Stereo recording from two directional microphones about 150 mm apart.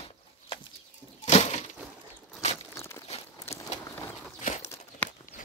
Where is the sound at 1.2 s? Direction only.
45° left (ahead or behind).